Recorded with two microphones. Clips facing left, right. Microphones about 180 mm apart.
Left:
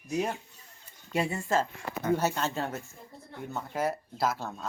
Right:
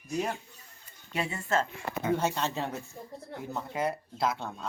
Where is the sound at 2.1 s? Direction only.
5° left (ahead or behind).